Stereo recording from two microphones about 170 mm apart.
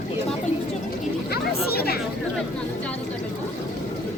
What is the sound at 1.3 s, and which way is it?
Chatter, 65° left (ahead or behind).